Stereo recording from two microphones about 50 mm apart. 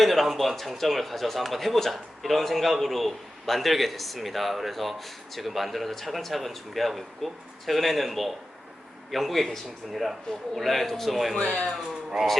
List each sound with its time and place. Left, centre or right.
0.0 s speech: centre
11.3 s speech: left
12.1 s speech: centre